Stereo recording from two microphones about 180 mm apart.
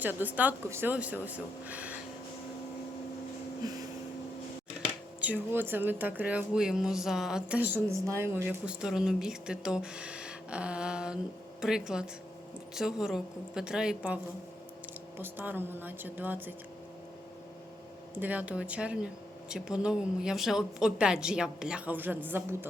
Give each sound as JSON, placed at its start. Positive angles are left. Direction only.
{"t": 0.0, "sound": "speech", "side_deg": -10}
{"t": 3.6, "sound": "a sound", "side_deg": -20}
{"t": 5.2, "sound": "speech", "side_deg": -10}
{"t": 15.2, "sound": "speech", "side_deg": -10}
{"t": 18.1, "sound": "speech", "side_deg": -10}